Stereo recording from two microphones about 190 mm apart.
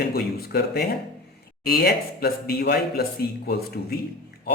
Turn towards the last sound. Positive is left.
turn(degrees=55)  # may be behind; listen again after turning